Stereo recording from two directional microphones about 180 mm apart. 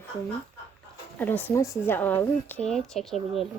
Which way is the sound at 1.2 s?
10° left (ahead or behind).